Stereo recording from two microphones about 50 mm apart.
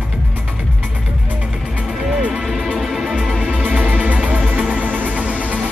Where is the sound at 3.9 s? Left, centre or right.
Right.